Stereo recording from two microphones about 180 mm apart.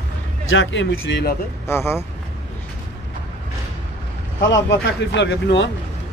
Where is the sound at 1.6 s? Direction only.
15° left (ahead or behind).